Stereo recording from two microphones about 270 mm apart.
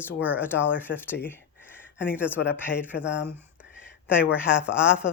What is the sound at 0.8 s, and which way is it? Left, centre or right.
Speech, centre.